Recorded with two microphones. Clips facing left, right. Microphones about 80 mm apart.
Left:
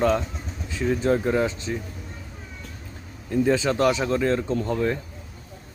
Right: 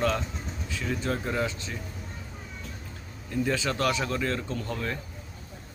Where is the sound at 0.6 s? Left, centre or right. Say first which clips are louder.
Left 10 dB; left.